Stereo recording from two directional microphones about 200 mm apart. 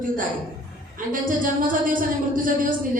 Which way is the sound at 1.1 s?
40° right (ahead or behind).